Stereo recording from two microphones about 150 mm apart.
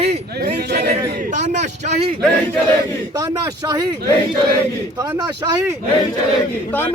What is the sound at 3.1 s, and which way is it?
Speech, 25° right (ahead or behind).